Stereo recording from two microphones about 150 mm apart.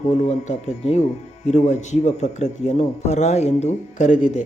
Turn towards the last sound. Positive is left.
turn(degrees=55)  # may be behind; listen again after turning